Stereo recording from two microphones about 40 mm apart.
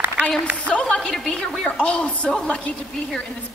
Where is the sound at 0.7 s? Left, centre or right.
Left.